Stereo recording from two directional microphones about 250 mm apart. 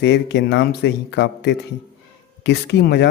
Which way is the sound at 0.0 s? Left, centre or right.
Left.